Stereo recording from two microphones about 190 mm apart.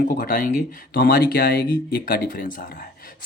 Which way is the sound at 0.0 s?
45° left (ahead or behind).